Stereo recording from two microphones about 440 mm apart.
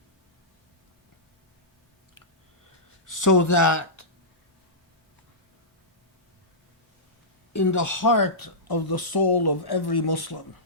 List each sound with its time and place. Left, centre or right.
3.1 s speech: left
7.5 s speech: left